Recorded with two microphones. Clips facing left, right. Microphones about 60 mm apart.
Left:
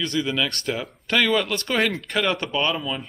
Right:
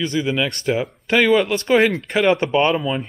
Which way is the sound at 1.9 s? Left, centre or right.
Right.